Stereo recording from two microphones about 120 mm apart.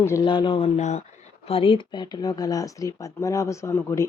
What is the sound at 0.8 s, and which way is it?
Speech, 70° left (ahead or behind).